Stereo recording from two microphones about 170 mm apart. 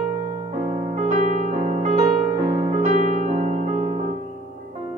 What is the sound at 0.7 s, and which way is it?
Music, 45° right (ahead or behind).